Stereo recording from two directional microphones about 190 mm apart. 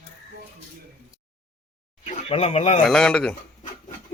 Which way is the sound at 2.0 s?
35° left (ahead or behind).